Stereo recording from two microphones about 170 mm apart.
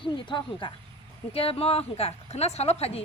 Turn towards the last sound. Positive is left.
turn(degrees=35)  # may be behind; listen again after turning